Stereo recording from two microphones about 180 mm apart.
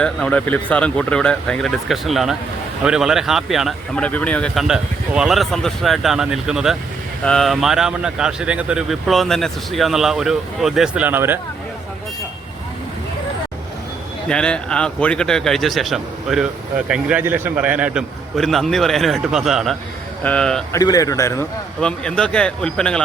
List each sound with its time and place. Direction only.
0.0 s speech: 5° left (ahead or behind); by 11.3 s 10° right (ahead or behind)
14.3 s speech: 5° left (ahead or behind)
20.7 s speech: 20° left (ahead or behind)
21.8 s speech: 5° left (ahead or behind)